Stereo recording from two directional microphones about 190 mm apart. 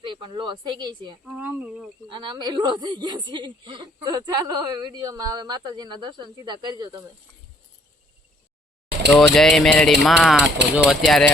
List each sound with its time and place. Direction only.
0.0 s speech: 25° right (ahead or behind)
1.2 s speech: 5° right (ahead or behind)
2.0 s speech: 25° right (ahead or behind)
9.0 s speech: centre (ahead or behind)